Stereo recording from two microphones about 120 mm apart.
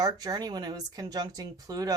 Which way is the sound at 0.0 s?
30° right (ahead or behind).